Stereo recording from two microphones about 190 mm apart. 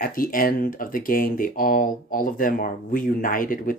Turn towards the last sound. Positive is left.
turn(degrees=45)  # may be behind; listen again after turning